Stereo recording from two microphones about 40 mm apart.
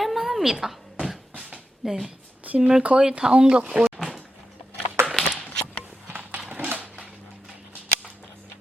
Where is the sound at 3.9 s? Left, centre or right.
Centre.